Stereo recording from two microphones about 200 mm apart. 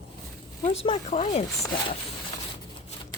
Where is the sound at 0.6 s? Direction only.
30° left (ahead or behind).